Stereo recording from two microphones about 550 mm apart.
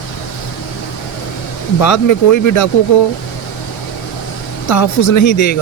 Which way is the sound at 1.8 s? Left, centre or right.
Left.